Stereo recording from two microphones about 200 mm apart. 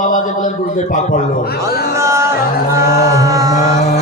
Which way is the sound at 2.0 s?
15° right (ahead or behind).